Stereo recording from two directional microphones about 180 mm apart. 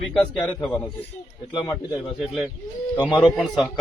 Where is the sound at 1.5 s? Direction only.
20° left (ahead or behind).